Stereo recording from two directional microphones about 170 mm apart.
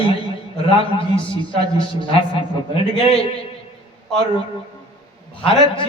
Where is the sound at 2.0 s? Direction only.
30° left (ahead or behind).